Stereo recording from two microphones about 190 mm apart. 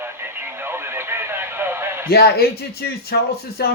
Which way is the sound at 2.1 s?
55° left (ahead or behind).